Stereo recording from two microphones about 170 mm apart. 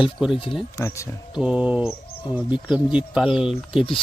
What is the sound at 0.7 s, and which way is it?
Speech, 15° left (ahead or behind).